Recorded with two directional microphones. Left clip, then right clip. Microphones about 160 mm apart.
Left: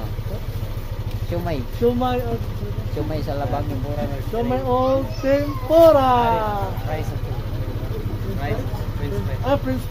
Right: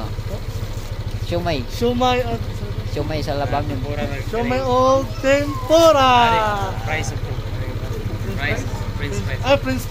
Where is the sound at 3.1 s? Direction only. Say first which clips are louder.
Right 4 dB; 25° right (ahead or behind).